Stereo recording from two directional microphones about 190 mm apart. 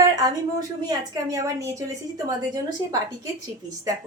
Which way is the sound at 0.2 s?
20° right (ahead or behind).